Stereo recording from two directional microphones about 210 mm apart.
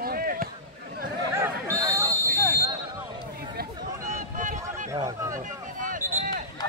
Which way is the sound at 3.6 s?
50° right (ahead or behind).